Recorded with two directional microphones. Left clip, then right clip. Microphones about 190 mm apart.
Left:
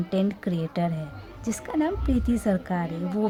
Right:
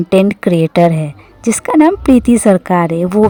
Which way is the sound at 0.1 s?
50° right (ahead or behind).